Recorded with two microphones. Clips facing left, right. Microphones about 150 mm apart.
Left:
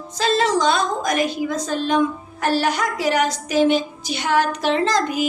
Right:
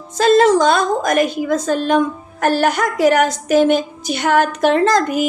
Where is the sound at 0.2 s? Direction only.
50° right (ahead or behind).